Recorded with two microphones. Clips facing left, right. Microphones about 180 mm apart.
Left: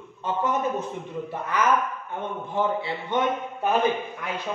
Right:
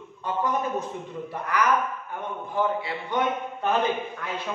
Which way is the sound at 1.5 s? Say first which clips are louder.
Left 1 dB; 25° left (ahead or behind).